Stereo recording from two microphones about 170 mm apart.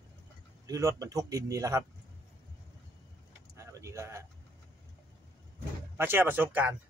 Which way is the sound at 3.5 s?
20° right (ahead or behind).